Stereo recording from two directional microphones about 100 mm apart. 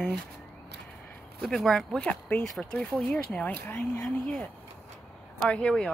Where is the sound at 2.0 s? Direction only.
15° left (ahead or behind).